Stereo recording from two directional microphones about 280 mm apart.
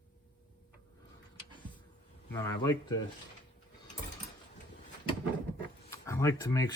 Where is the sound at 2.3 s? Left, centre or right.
Centre.